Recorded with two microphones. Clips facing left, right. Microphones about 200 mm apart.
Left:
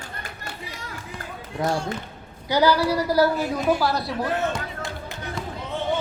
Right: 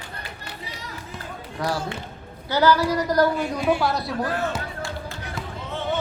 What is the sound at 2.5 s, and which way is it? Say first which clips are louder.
A woman's voice: even; 15° left (ahead or behind).